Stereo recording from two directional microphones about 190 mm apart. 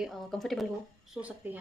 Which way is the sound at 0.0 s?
Centre (ahead or behind).